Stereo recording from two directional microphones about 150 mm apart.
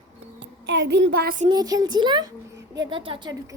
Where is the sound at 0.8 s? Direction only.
90° right.